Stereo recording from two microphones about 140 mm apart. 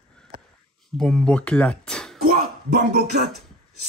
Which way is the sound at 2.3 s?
90° right.